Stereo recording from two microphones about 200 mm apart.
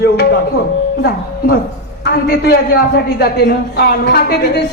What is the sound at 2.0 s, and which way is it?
A man's voice, 50° left (ahead or behind).